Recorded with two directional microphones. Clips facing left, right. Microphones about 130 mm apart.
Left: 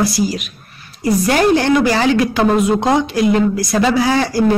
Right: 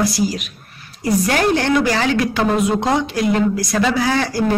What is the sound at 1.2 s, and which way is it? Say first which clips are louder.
Speech: left 5 dB; 10° left (ahead or behind).